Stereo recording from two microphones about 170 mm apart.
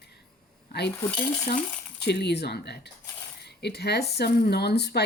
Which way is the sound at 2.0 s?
80° left.